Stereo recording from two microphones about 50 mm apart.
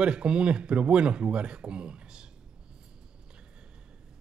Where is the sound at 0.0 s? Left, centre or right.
Centre.